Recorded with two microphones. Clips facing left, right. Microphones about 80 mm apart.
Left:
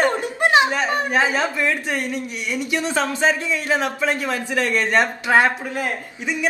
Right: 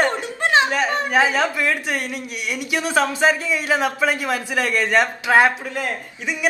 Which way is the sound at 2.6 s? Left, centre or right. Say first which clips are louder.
Right 2 dB; centre.